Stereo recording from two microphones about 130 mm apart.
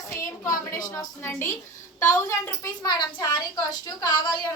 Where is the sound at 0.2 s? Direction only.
25° left (ahead or behind).